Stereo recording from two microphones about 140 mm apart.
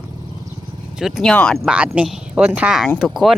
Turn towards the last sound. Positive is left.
turn(degrees=0)  # may be behind; listen again after turning